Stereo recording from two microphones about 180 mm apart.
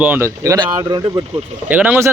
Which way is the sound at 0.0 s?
10° right (ahead or behind).